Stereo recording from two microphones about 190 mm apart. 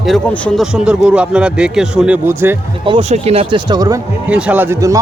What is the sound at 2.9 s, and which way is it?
Speech, 30° right (ahead or behind).